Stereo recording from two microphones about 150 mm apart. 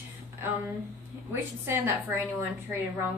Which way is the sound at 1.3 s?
15° right (ahead or behind).